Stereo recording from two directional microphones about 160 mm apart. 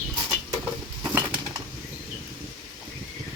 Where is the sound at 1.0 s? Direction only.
10° right (ahead or behind).